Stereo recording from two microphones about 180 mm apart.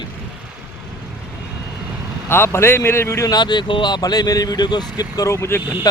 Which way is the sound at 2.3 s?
15° left (ahead or behind).